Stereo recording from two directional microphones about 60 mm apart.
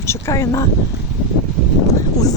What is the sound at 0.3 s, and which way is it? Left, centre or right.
Speech, left.